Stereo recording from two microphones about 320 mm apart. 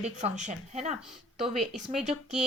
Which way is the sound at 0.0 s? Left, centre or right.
Right.